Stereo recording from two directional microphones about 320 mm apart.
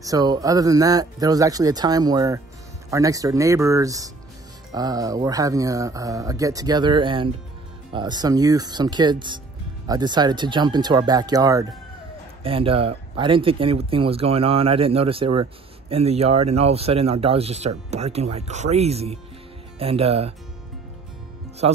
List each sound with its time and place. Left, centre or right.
0.0 s speech: centre